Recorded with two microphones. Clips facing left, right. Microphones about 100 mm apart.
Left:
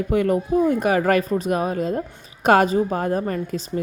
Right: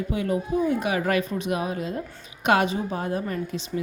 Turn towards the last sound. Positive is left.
turn(degrees=45)  # may be behind; listen again after turning